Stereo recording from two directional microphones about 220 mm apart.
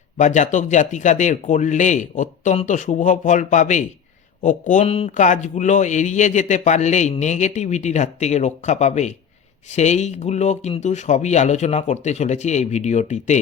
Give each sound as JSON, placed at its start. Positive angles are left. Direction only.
{"t": 0.2, "sound": "a man's voice", "side_deg": 35}